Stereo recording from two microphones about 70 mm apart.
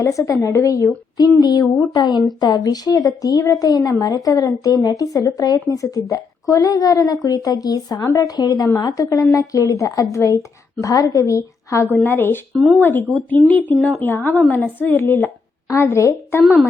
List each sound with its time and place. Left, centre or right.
0.0 s a woman's voice: left
1.4 s a woman's voice: left
8.0 s a woman's voice: left
8.4 s a woman's voice: left
12.0 s a woman's voice: left